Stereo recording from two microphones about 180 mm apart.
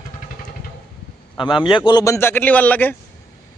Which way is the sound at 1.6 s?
25° left (ahead or behind).